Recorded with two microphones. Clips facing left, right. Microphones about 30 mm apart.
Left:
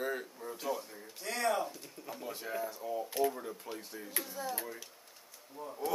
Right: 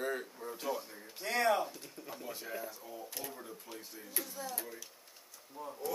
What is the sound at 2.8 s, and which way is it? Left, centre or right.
Speech, left.